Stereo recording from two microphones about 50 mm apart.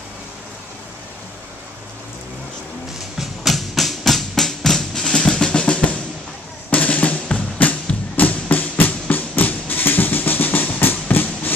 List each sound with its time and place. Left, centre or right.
3.2 s music: centre; by 5.9 s left
6.7 s drum: left
8.2 s a sound: left